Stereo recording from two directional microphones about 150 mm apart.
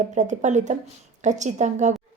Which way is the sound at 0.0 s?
55° right (ahead or behind).